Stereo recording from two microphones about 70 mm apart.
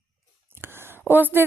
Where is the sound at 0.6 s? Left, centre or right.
Right.